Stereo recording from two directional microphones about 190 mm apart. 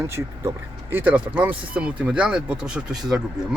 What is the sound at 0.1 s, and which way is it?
Speech, 10° right (ahead or behind).